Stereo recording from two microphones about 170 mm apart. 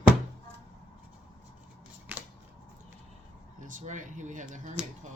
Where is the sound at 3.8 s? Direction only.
45° right (ahead or behind).